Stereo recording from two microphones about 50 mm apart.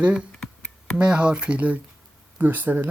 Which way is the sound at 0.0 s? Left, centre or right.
Right.